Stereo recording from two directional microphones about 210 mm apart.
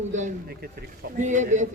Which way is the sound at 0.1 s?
35° right (ahead or behind).